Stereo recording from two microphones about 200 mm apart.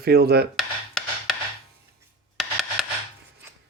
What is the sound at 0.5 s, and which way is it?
Rub, centre (ahead or behind).